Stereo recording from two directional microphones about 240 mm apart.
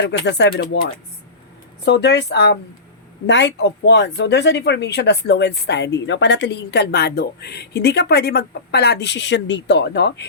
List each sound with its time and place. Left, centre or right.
0.0 s speech: left